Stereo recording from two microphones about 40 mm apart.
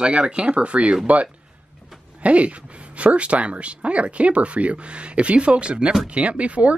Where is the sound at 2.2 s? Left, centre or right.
Right.